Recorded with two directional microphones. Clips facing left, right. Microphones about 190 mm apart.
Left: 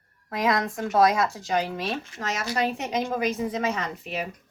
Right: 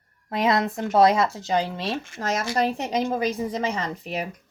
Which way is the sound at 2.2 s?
40° right (ahead or behind).